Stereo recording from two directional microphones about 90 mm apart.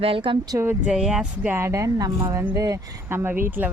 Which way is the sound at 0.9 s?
5° right (ahead or behind).